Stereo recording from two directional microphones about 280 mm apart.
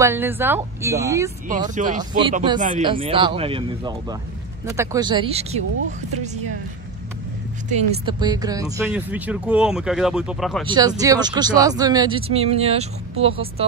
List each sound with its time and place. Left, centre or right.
0.0 s speech: centre
1.8 s speech: right
7.7 s speech: centre
10.7 s speech: centre